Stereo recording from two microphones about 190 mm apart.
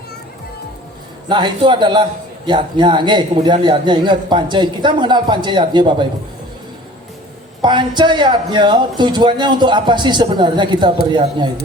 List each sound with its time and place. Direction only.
1.3 s a man's voice: 25° right (ahead or behind)
7.6 s a man's voice: 25° right (ahead or behind)